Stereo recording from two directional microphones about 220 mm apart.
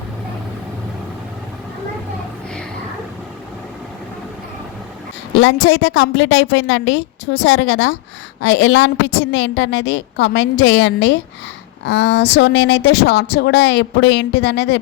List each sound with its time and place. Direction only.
5.3 s a woman's voice: 60° left (ahead or behind)